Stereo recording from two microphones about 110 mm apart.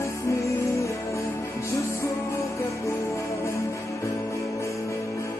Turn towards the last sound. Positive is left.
turn(degrees=30)  # may be behind; listen again after turning